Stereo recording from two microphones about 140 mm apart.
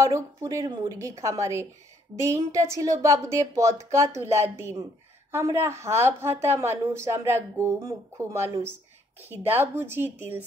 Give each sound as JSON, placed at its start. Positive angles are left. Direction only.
{"t": 0.0, "sound": "a woman's voice", "side_deg": -20}